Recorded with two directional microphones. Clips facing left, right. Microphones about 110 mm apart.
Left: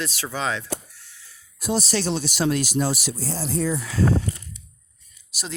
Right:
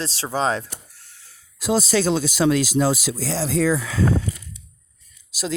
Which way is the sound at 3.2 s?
90° right.